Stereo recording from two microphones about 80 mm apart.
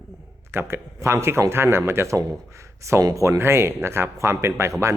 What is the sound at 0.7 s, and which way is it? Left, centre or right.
A man's voice, right.